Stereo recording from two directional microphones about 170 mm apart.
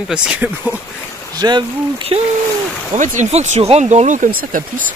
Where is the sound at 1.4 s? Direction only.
25° right (ahead or behind).